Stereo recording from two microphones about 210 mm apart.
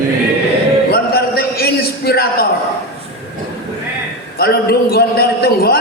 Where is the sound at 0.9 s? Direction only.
45° left (ahead or behind).